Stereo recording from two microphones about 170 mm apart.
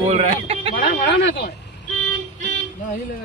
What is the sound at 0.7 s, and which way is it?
Speech, 70° left (ahead or behind).